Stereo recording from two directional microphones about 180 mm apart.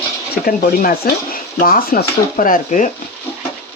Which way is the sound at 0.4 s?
55° left (ahead or behind).